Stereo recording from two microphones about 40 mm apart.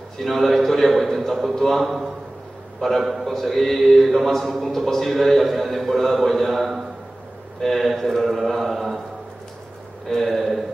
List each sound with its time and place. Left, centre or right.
0.2 s a man's voice: centre
10.0 s a man's voice: centre